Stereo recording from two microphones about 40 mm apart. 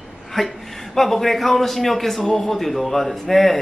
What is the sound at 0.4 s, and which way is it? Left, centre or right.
A man's voice, centre.